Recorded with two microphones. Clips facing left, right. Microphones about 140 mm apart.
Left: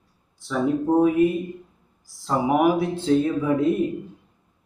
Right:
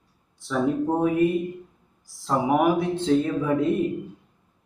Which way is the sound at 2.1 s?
Centre (ahead or behind).